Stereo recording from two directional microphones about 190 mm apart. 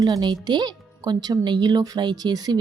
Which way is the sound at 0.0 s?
20° right (ahead or behind).